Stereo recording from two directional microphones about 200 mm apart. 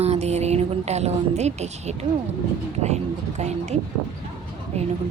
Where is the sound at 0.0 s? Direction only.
30° right (ahead or behind).